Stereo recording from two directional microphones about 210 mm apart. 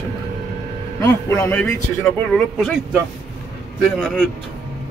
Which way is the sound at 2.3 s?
Centre (ahead or behind).